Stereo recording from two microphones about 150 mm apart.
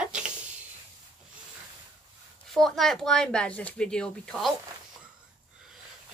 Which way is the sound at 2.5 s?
Centre (ahead or behind).